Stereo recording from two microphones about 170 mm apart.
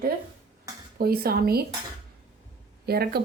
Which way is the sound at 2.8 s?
65° right (ahead or behind).